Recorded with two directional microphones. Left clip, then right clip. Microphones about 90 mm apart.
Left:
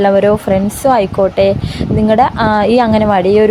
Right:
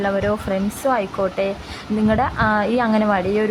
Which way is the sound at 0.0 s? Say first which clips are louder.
Left 11 dB; 60° left (ahead or behind).